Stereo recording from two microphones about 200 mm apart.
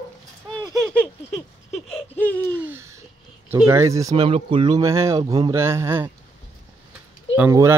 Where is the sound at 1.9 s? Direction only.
10° left (ahead or behind).